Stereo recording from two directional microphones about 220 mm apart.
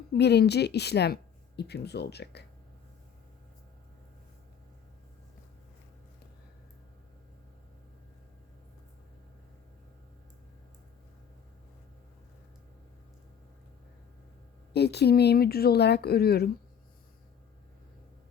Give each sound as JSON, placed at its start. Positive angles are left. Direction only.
{"t": 0.1, "sound": "speech", "side_deg": 50}
{"t": 14.7, "sound": "speech", "side_deg": 50}